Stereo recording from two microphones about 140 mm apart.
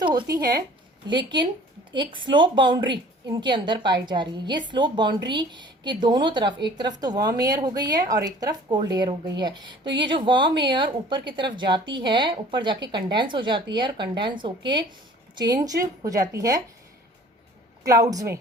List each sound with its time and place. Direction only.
0.0 s a woman's voice: 30° right (ahead or behind)
17.8 s a woman's voice: 25° right (ahead or behind)